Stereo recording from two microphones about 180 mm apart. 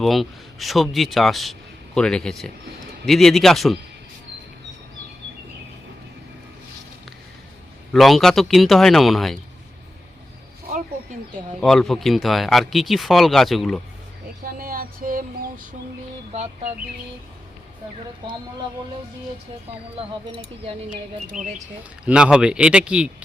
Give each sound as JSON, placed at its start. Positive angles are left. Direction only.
{"t": 0.0, "sound": "speech", "side_deg": 0}
{"t": 7.9, "sound": "speech", "side_deg": 0}
{"t": 11.6, "sound": "speech", "side_deg": 0}
{"t": 14.4, "sound": "a sound", "side_deg": -55}
{"t": 16.3, "sound": "speech", "side_deg": -35}
{"t": 20.0, "sound": "speech", "side_deg": -30}
{"t": 21.3, "sound": "speech", "side_deg": -5}